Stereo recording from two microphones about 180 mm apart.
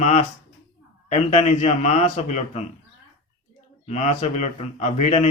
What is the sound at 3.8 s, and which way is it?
A man's voice, 40° left (ahead or behind).